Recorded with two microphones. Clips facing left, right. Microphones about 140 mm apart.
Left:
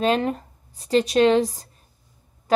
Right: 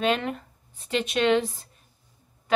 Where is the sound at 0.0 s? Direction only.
35° left (ahead or behind).